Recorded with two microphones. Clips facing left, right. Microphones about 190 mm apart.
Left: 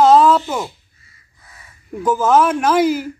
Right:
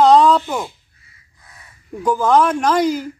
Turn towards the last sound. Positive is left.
turn(degrees=5)  # may be behind; listen again after turning